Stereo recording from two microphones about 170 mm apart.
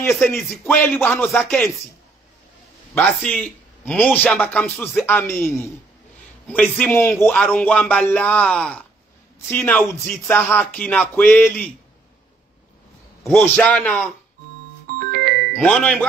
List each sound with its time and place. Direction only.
0.4 s speech: centre (ahead or behind)
2.9 s speech: 5° left (ahead or behind)
13.3 s speech: 5° left (ahead or behind)
15.0 s music: 65° right (ahead or behind)
15.5 s speech: 5° left (ahead or behind)